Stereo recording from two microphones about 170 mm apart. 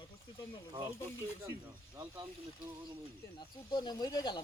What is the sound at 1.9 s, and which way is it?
Speech, 25° right (ahead or behind).